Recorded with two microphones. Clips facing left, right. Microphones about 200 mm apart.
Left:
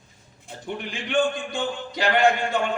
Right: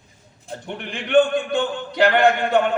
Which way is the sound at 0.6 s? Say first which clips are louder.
Right 1 dB; 60° right (ahead or behind).